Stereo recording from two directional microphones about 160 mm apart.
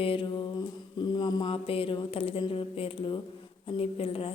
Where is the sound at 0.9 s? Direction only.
30° left (ahead or behind).